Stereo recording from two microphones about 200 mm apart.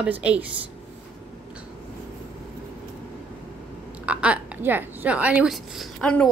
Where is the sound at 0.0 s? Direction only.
5° right (ahead or behind).